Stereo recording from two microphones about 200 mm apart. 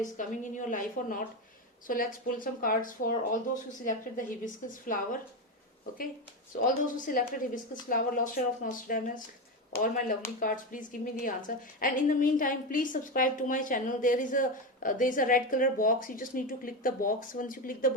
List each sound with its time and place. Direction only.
0.0 s a woman's voice: 40° left (ahead or behind)
6.6 s a woman's voice: 40° left (ahead or behind)